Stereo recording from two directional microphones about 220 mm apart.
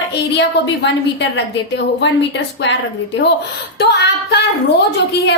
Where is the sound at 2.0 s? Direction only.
50° left (ahead or behind).